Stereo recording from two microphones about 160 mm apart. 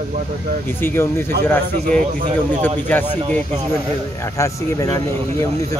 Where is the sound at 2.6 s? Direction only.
10° left (ahead or behind).